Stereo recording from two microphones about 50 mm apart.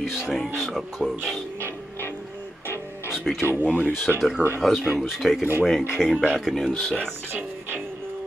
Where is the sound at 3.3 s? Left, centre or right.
Centre.